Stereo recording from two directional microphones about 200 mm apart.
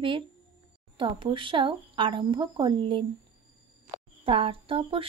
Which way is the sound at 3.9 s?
25° right (ahead or behind).